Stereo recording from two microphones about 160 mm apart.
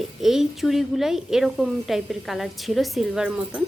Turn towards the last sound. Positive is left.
turn(degrees=-5)  # may be behind; listen again after turning